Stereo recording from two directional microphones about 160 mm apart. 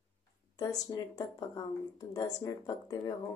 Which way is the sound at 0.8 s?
25° left (ahead or behind).